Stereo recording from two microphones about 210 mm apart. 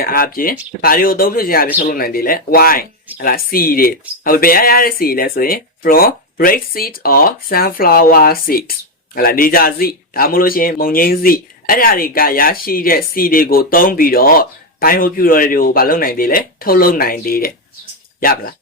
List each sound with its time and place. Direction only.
0.0 s speech: 45° left (ahead or behind)